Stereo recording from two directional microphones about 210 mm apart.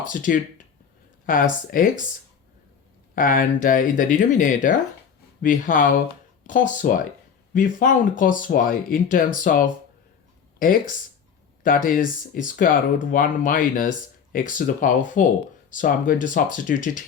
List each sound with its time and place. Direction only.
0.0 s speech: 40° left (ahead or behind)
3.2 s speech: 40° left (ahead or behind)